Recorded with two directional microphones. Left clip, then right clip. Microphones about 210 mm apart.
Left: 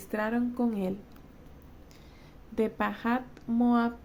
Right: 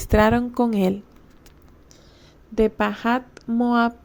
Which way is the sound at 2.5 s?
30° right (ahead or behind).